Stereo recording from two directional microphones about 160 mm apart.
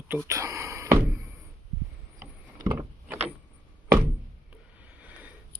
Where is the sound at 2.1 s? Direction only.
20° right (ahead or behind).